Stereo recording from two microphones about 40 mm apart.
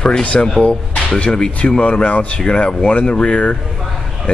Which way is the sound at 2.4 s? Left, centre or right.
Left.